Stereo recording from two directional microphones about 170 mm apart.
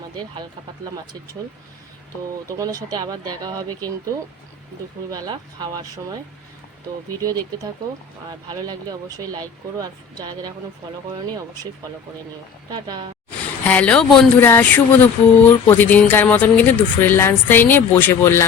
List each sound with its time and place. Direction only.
2.6 s speech: 20° right (ahead or behind)
5.1 s speech: 25° right (ahead or behind)
8.3 s speech: 25° right (ahead or behind)
12.7 s speech: 25° right (ahead or behind)
13.7 s speech: 10° left (ahead or behind)